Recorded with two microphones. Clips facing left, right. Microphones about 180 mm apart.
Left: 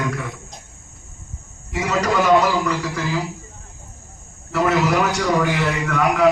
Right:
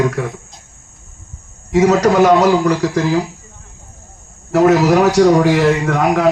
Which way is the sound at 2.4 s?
40° right (ahead or behind).